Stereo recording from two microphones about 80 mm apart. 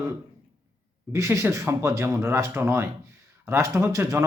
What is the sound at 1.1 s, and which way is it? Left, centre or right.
Speech, right.